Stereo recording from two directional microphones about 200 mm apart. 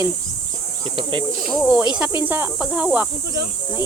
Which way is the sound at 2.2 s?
10° right (ahead or behind).